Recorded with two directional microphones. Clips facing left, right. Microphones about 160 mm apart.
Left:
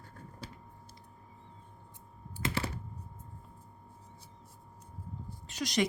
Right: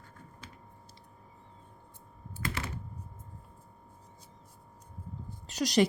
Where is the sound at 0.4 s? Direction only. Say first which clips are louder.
Left 6 dB; 35° left (ahead or behind).